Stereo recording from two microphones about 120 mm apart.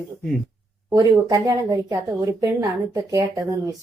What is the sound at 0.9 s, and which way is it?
A woman's voice, 30° right (ahead or behind).